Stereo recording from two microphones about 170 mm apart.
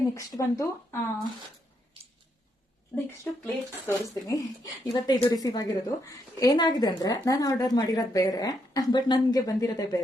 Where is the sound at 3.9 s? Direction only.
20° left (ahead or behind).